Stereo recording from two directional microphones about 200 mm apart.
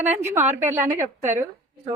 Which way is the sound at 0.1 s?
10° right (ahead or behind).